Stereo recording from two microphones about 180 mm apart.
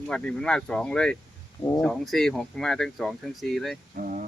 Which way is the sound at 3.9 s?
45° right (ahead or behind).